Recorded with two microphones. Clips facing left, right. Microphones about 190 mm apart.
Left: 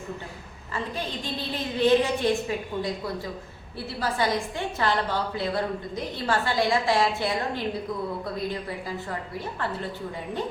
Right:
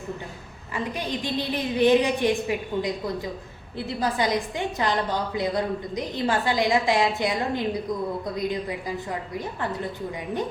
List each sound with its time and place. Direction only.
0.7 s a woman's voice: 15° right (ahead or behind)
9.0 s a woman's voice: 15° right (ahead or behind)